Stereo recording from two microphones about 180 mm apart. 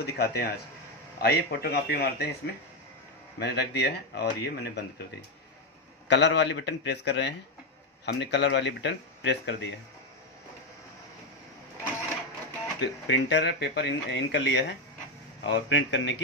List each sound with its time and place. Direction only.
0.0 s a man's voice: 60° left (ahead or behind)
6.0 s speech: 75° left (ahead or behind)
12.8 s a man's voice: 80° left